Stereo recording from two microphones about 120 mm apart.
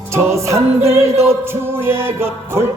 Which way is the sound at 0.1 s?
25° right (ahead or behind).